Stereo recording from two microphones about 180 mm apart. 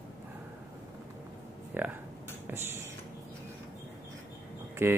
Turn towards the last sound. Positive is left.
turn(degrees=-15)  # may be behind; listen again after turning